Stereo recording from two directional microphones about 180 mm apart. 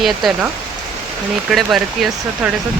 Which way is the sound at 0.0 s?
Centre (ahead or behind).